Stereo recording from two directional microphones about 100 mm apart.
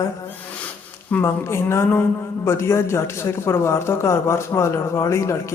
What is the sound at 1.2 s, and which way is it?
A woman's voice, 30° left (ahead or behind).